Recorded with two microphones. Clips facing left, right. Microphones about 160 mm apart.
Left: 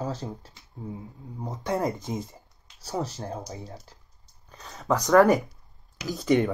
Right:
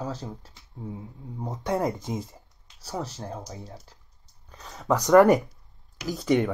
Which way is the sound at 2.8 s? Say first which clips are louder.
Left 2 dB; 5° left (ahead or behind).